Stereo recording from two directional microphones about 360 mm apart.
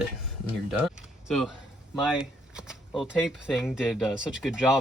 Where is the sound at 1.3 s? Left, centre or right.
Centre.